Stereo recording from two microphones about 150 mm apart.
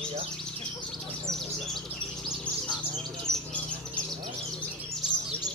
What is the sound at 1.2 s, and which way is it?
Bird, centre (ahead or behind).